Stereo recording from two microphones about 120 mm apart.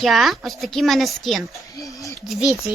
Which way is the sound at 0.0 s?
Centre (ahead or behind).